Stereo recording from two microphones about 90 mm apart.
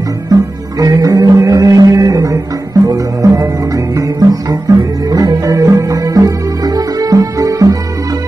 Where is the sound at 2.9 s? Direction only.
40° right (ahead or behind).